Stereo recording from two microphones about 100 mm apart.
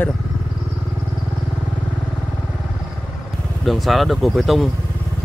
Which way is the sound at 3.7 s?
Centre (ahead or behind).